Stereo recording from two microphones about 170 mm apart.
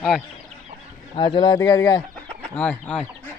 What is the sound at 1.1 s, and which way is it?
Speech, 30° left (ahead or behind).